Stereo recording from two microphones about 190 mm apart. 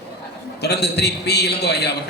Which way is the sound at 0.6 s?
60° left (ahead or behind).